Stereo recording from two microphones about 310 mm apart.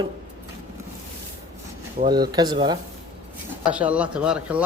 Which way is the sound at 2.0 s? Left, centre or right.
Centre.